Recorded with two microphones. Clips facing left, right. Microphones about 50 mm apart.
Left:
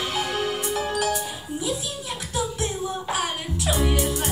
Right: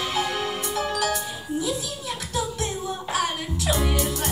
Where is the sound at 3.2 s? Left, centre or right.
Centre.